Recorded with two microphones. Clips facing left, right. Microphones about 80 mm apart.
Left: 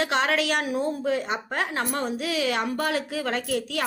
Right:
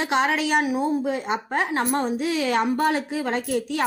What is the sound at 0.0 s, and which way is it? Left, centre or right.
A woman's voice, centre.